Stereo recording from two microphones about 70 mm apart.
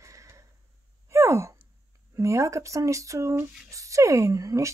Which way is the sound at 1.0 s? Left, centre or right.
Right.